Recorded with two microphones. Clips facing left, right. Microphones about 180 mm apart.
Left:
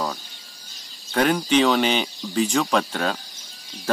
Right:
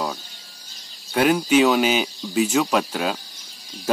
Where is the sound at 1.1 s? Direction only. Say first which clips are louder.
Right 2 dB; 5° right (ahead or behind).